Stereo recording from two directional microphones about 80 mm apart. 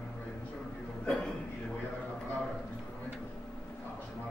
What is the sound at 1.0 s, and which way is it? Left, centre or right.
Speech, centre.